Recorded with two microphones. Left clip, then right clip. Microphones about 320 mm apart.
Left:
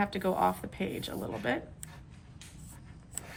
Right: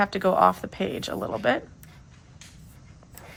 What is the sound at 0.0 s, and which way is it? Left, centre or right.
Speech, centre.